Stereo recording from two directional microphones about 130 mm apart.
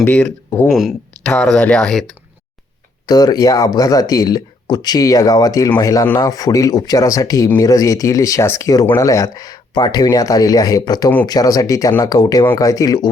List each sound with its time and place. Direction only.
0.0 s speech: 10° left (ahead or behind)
0.7 s speech: centre (ahead or behind)
3.1 s speech: 30° left (ahead or behind)